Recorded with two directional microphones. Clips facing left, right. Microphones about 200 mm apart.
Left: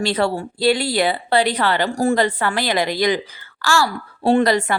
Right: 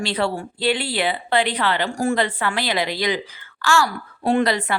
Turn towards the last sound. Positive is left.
turn(degrees=45)  # may be behind; listen again after turning